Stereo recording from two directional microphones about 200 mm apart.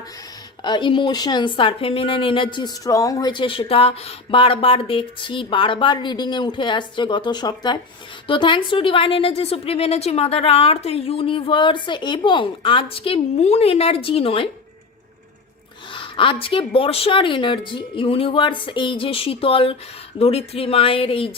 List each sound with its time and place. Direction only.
0.6 s a woman's voice: 25° left (ahead or behind)
15.9 s a woman's voice: 25° left (ahead or behind)